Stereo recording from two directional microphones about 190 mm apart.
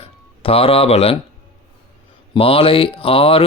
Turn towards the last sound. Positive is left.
turn(degrees=30)  # may be behind; listen again after turning